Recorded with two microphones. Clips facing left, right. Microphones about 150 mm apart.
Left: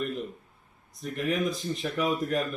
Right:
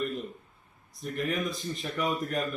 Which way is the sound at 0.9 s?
Centre (ahead or behind).